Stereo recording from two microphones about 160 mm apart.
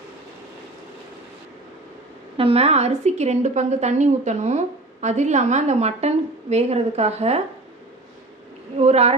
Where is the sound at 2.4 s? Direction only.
40° right (ahead or behind).